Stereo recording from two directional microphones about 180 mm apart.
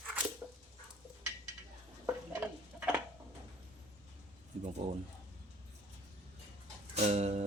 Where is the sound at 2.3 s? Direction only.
10° right (ahead or behind).